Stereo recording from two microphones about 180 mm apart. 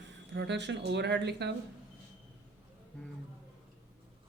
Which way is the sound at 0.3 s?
70° right (ahead or behind).